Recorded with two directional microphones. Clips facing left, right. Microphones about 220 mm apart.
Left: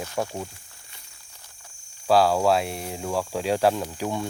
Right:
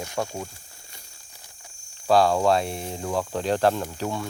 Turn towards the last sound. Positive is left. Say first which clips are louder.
# left 1 dB
turn(degrees=15)  # may be behind; listen again after turning